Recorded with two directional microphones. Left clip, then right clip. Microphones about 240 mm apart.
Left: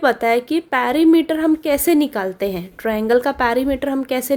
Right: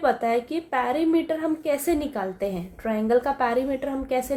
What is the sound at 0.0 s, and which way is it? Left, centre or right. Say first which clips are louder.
A woman's voice: left 6 dB; left.